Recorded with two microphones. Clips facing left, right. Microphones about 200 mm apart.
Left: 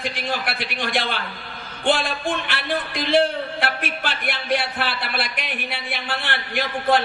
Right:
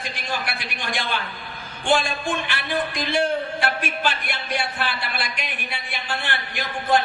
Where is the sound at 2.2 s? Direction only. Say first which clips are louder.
Left 1 dB; 55° left (ahead or behind).